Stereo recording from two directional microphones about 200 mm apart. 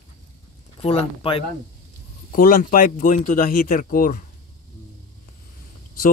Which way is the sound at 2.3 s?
45° left (ahead or behind).